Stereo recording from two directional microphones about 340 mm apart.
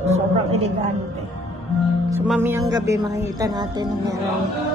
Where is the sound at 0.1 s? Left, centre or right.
Centre.